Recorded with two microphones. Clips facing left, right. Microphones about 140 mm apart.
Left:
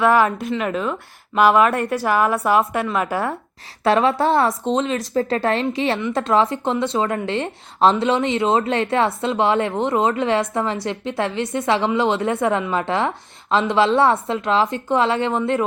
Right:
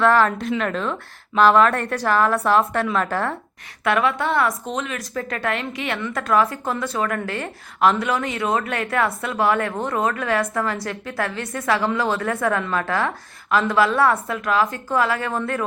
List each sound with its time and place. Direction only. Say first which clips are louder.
0.0 s a woman's voice: left 1 dB; 10° left (ahead or behind)
3.8 s speech: left 4 dB; 30° left (ahead or behind)